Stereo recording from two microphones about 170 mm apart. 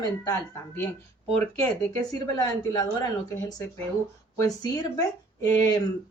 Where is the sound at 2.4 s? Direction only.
20° left (ahead or behind).